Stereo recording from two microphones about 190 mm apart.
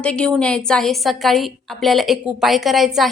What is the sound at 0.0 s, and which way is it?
A woman's voice, 5° left (ahead or behind).